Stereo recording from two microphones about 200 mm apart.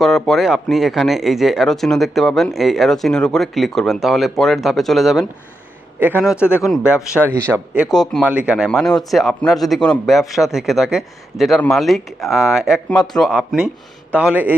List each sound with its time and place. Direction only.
0.0 s a man's voice: centre (ahead or behind)